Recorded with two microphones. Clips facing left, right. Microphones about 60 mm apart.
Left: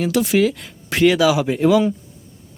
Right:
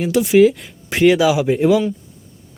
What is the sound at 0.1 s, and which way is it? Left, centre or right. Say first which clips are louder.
Speech: right 2 dB; centre.